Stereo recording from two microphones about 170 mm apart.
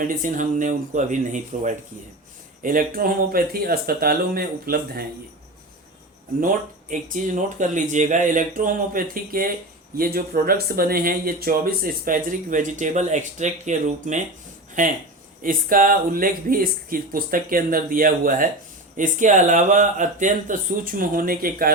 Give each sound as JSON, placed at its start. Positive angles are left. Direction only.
{"t": 0.0, "sound": "speech", "side_deg": -50}
{"t": 6.4, "sound": "speech", "side_deg": -55}
{"t": 15.4, "sound": "speech", "side_deg": -55}